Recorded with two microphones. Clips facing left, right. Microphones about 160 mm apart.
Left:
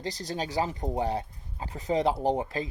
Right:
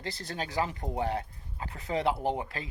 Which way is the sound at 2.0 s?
40° left (ahead or behind).